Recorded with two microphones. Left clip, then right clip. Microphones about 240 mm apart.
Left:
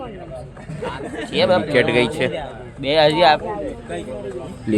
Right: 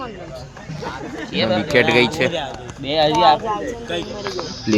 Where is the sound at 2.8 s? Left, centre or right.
Left.